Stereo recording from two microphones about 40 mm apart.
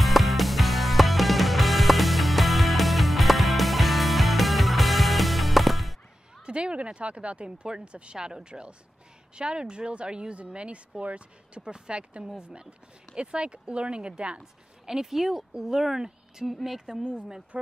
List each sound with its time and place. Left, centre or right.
0.0 s music: centre
6.4 s speech: right
14.4 s speech: centre
16.8 s speech: centre